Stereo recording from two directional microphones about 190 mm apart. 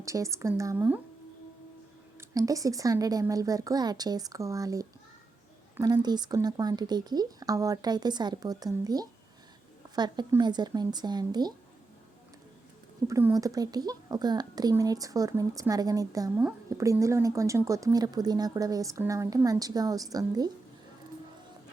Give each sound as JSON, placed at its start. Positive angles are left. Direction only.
{"t": 0.0, "sound": "speech", "side_deg": -15}
{"t": 2.3, "sound": "speech", "side_deg": -20}
{"t": 13.1, "sound": "speech", "side_deg": -15}